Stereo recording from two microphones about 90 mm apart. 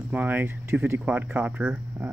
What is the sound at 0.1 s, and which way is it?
Speech, 20° right (ahead or behind).